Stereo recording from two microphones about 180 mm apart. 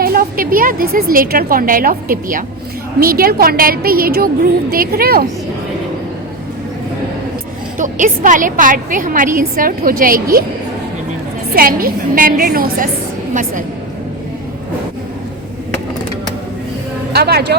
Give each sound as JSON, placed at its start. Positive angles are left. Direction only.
{"t": 0.0, "sound": "a woman's voice", "side_deg": -55}
{"t": 7.8, "sound": "a woman's voice", "side_deg": -45}
{"t": 11.5, "sound": "a woman's voice", "side_deg": -55}
{"t": 17.1, "sound": "speech", "side_deg": -60}